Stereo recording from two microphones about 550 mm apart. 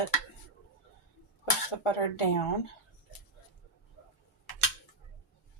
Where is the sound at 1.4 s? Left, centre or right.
Left.